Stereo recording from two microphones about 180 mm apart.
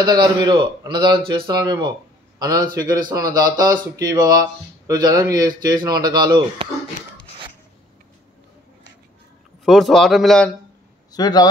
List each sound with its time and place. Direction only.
0.0 s speech: 25° right (ahead or behind)
9.7 s a man's voice: centre (ahead or behind)
11.1 s speech: 20° left (ahead or behind)